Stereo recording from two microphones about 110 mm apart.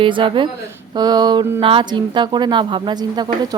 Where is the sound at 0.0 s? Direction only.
50° right (ahead or behind).